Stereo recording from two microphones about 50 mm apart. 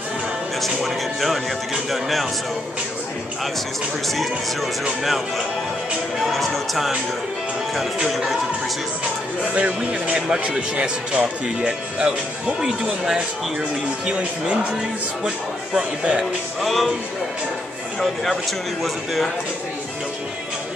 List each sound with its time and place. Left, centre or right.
0.6 s speech: centre
6.1 s speech: centre
9.5 s speech: right
16.6 s speech: centre
18.2 s speech: centre